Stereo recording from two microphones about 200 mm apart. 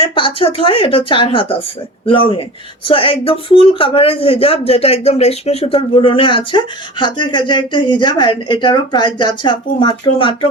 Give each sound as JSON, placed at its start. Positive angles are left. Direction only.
{"t": 0.0, "sound": "speech", "side_deg": 25}